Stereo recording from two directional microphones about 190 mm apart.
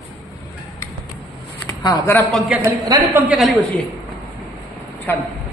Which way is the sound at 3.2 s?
5° right (ahead or behind).